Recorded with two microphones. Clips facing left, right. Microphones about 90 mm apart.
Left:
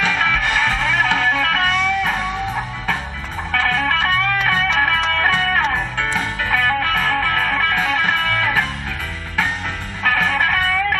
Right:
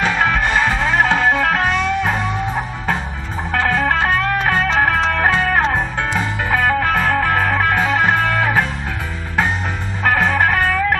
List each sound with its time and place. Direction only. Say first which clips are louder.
0.0 s music: right 2 dB; 30° right (ahead or behind)
3.5 s music: right 2 dB; 30° right (ahead or behind)
10.0 s music: right 3 dB; 30° right (ahead or behind)